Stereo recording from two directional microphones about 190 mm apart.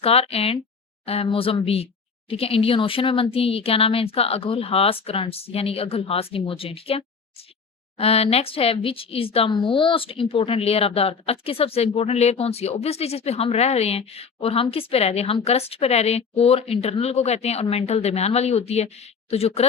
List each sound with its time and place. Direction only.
0.0 s speech: 30° left (ahead or behind)